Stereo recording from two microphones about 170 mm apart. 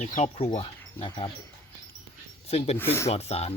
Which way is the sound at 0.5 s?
30° left (ahead or behind).